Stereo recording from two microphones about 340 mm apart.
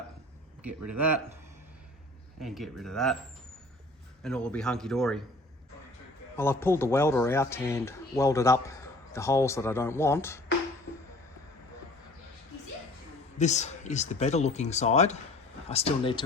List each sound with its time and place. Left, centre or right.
0.7 s speech: right
2.4 s a man's voice: centre
4.2 s a man's voice: centre
6.3 s speech: centre
13.4 s speech: centre